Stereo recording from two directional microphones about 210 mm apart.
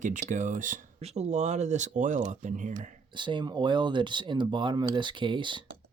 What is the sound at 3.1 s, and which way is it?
Speech, 20° right (ahead or behind).